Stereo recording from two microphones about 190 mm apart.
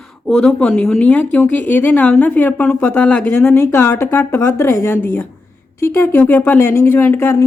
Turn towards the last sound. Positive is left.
turn(degrees=10)  # may be behind; listen again after turning